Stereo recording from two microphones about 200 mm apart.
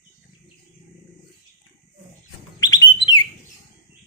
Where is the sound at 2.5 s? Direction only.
20° left (ahead or behind).